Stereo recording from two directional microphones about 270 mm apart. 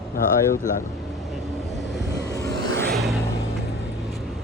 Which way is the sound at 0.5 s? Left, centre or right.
Left.